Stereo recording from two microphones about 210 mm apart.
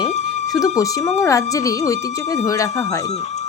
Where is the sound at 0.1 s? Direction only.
35° left (ahead or behind).